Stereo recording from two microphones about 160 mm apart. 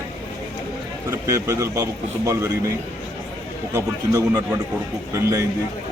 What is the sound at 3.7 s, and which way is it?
Speech, 20° right (ahead or behind).